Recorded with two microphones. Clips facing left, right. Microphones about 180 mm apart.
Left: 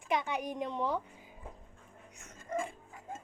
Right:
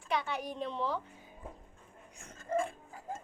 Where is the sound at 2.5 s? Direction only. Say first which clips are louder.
Right 3 dB; 30° right (ahead or behind).